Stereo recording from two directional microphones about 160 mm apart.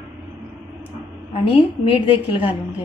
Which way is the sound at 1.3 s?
35° left (ahead or behind).